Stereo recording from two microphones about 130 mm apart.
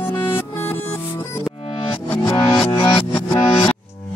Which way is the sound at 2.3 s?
35° left (ahead or behind).